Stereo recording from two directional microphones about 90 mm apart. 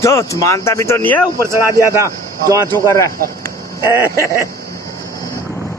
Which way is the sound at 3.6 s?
35° left (ahead or behind).